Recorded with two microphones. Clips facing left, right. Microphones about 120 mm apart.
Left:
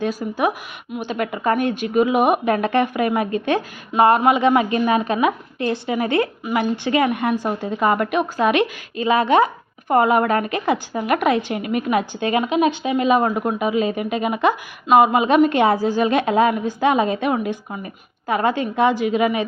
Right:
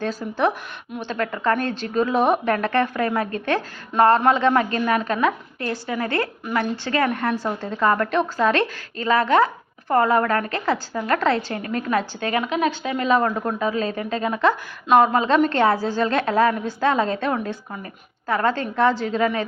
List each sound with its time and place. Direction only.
0.0 s a woman's voice: 10° left (ahead or behind)